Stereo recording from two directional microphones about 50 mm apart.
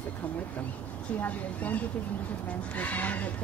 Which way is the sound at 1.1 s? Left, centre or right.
Left.